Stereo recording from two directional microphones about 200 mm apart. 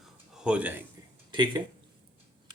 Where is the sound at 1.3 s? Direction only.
25° right (ahead or behind).